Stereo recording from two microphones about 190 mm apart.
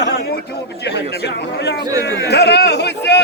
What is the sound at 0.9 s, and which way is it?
Speech, 65° left (ahead or behind).